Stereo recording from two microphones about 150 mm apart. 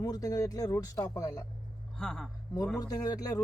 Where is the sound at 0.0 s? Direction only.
25° left (ahead or behind).